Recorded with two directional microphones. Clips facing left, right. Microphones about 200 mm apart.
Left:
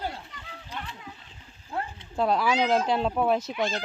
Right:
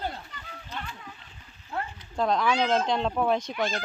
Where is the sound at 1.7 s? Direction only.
25° left (ahead or behind).